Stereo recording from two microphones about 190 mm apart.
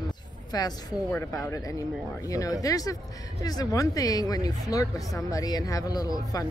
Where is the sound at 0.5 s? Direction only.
20° left (ahead or behind).